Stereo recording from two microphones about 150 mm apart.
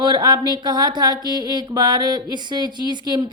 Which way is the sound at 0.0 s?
30° right (ahead or behind).